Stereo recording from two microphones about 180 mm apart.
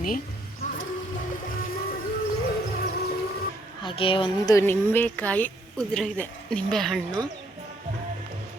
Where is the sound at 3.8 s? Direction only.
30° left (ahead or behind).